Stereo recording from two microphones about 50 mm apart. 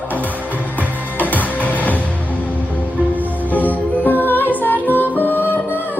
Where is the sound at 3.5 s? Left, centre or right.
Left.